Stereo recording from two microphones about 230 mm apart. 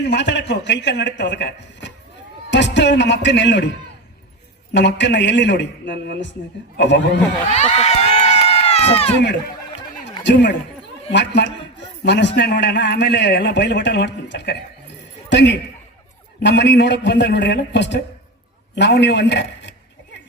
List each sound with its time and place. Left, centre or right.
0.0 s a man's voice: left
4.7 s a man's voice: left
7.5 s run: left
11.1 s a man's voice: left